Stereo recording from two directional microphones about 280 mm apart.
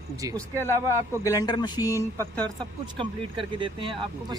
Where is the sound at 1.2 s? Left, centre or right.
Centre.